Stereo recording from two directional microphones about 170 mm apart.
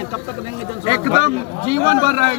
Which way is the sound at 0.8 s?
35° right (ahead or behind).